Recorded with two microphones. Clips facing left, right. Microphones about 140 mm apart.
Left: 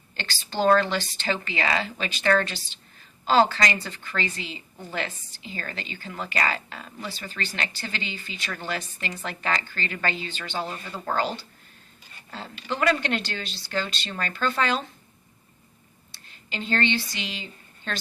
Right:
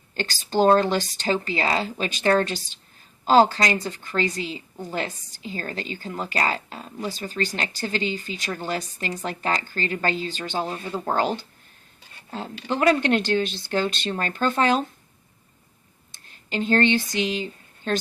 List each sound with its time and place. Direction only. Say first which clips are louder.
0.2 s a woman's voice: right 5 dB; 45° right (ahead or behind)
16.1 s speech: right 7 dB; 50° right (ahead or behind)